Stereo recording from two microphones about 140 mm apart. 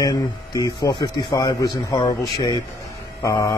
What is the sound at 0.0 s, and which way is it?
Speech, 25° left (ahead or behind).